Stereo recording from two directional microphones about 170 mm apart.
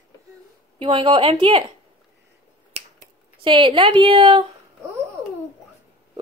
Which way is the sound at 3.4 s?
30° right (ahead or behind).